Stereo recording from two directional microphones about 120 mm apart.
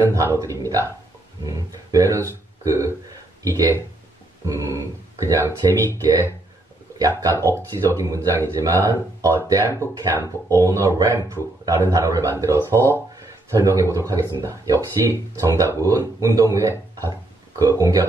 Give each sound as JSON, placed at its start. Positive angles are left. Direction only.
{"t": 0.0, "sound": "speech", "side_deg": -20}
{"t": 7.5, "sound": "speech", "side_deg": -25}